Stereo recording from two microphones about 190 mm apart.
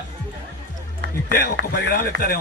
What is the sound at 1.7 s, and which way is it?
Speech, 50° left (ahead or behind).